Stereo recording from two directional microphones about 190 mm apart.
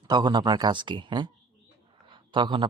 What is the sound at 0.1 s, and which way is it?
Speech, 25° right (ahead or behind).